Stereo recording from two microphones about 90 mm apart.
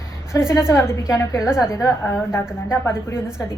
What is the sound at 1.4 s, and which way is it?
Speech, 5° right (ahead or behind).